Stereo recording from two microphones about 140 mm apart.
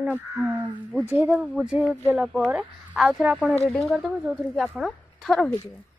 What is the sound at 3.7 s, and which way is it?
Female singing, centre (ahead or behind).